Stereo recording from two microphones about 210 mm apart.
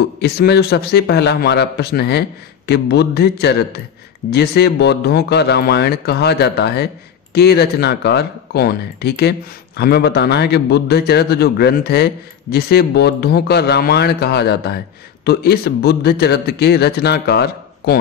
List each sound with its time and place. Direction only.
0.2 s a man's voice: 50° left (ahead or behind)